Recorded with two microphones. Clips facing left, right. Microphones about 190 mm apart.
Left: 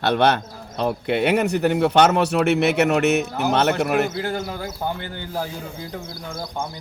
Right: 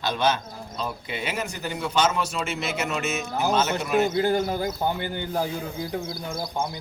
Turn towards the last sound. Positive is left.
turn(degrees=-10)  # may be behind; listen again after turning